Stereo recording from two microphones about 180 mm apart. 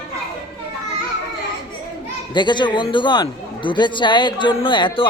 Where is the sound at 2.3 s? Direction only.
25° left (ahead or behind).